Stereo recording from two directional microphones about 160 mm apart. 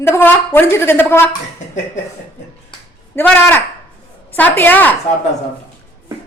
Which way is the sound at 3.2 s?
10° left (ahead or behind).